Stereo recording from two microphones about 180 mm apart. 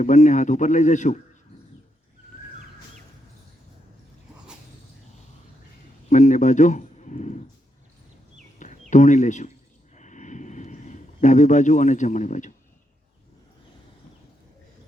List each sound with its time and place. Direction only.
0.0 s speech: 40° left (ahead or behind)
6.1 s a man's voice: 40° left (ahead or behind)
8.5 s a sound: 45° left (ahead or behind)